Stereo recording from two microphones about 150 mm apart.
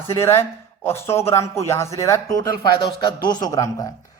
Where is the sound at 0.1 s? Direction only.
15° left (ahead or behind).